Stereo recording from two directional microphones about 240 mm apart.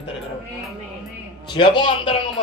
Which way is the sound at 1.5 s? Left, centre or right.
Centre.